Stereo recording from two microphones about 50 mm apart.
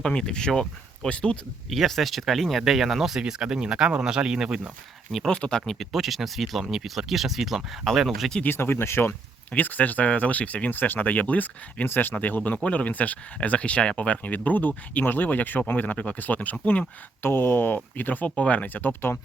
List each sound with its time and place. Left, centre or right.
0.0 s speech: centre
1.7 s speech: centre
5.3 s speech: centre
5.8 s speech: centre
8.4 s speech: left
9.6 s speech: left
11.9 s speech: left
12.1 s speech: left
17.2 s speech: left
17.9 s speech: left